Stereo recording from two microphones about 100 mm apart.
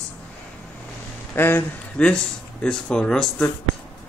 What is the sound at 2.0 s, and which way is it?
Speech, 10° left (ahead or behind).